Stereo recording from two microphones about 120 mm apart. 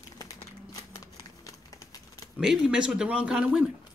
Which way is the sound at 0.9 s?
30° left (ahead or behind).